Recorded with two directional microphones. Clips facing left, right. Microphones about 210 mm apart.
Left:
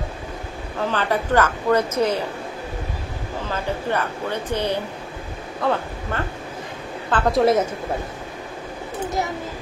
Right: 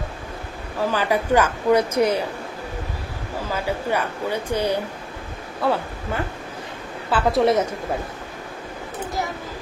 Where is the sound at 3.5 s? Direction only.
10° right (ahead or behind).